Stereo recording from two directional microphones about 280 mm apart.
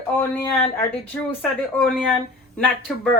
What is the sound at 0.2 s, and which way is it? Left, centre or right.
Speech, centre.